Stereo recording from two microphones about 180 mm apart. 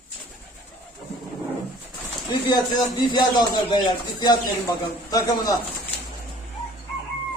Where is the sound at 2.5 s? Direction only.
20° left (ahead or behind).